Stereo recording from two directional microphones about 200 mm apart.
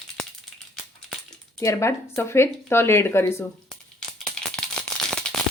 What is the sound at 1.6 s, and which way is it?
A woman's voice, 15° left (ahead or behind).